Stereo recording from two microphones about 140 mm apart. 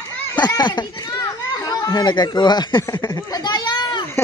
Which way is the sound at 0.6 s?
30° left (ahead or behind).